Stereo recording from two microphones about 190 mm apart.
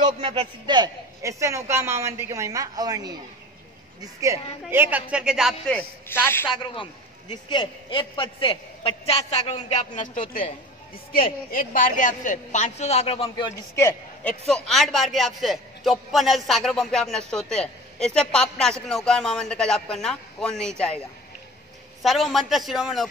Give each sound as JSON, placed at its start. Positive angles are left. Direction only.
{"t": 0.0, "sound": "a man's voice", "side_deg": -30}
{"t": 6.5, "sound": "a man's voice", "side_deg": 25}
{"t": 11.1, "sound": "a woman's voice", "side_deg": 50}
{"t": 13.7, "sound": "a man's voice", "side_deg": 15}
{"t": 14.5, "sound": "a man's voice", "side_deg": 0}
{"t": 22.0, "sound": "a man's voice", "side_deg": 0}